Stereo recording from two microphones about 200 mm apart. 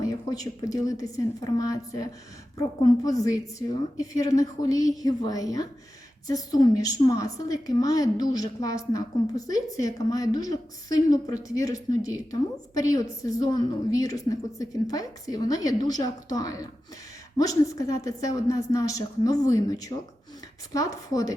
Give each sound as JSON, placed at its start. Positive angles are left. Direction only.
{"t": 0.0, "sound": "a woman's voice", "side_deg": 15}